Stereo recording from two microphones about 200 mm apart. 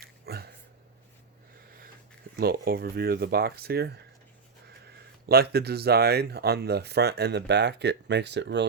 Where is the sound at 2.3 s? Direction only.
50° right (ahead or behind).